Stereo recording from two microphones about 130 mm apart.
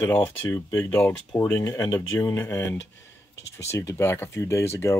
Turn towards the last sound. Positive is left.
turn(degrees=20)  # may be behind; listen again after turning